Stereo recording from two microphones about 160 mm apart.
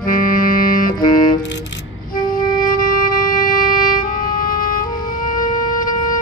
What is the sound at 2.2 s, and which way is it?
Music, 60° left (ahead or behind).